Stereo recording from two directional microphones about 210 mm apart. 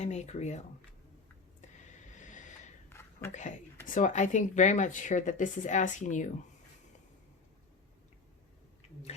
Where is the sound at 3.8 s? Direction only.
35° left (ahead or behind).